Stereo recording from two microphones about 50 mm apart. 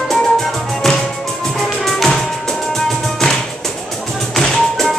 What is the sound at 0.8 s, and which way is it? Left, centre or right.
Music, centre.